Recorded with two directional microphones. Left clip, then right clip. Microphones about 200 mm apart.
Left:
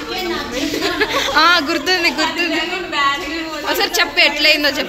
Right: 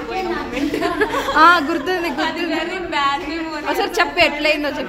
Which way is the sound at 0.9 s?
20° right (ahead or behind).